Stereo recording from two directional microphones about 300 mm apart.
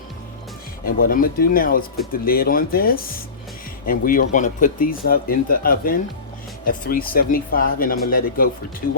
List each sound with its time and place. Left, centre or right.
0.9 s speech: left